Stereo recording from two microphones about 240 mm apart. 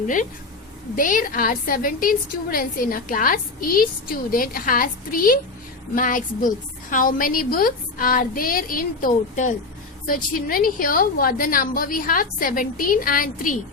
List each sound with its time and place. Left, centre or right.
0.9 s a woman's voice: left